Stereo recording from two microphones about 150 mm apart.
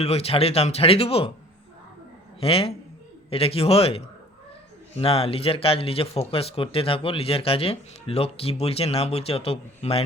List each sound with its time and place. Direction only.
0.0 s speech: 45° left (ahead or behind)
2.4 s speech: 40° left (ahead or behind)